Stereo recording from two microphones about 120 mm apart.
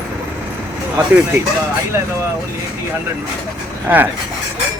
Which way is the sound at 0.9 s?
15° right (ahead or behind).